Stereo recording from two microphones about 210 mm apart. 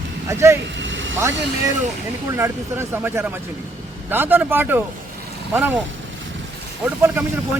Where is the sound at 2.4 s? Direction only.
10° right (ahead or behind).